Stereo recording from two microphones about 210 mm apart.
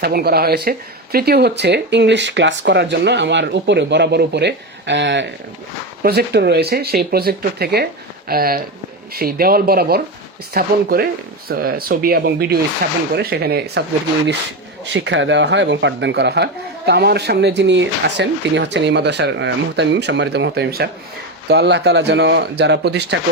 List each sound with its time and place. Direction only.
0.0 s speech: 45° right (ahead or behind)
14.8 s speech: 60° right (ahead or behind)